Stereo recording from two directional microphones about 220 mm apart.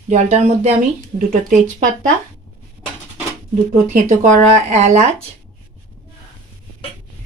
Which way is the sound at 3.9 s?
35° right (ahead or behind).